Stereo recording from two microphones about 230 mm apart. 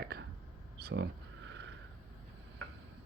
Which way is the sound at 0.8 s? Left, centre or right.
Right.